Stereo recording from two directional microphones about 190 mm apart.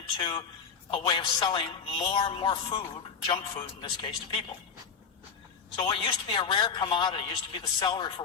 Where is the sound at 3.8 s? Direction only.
25° left (ahead or behind).